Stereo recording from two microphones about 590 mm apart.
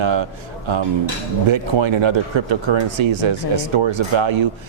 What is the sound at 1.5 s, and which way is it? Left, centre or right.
A man's voice, right.